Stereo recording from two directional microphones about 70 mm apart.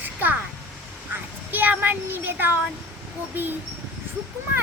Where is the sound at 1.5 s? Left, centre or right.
Right.